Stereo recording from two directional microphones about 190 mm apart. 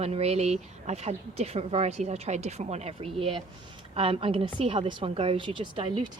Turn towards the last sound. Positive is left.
turn(degrees=-25)  # may be behind; listen again after turning